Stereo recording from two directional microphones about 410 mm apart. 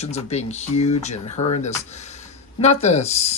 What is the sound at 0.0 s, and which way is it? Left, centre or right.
Speech, centre.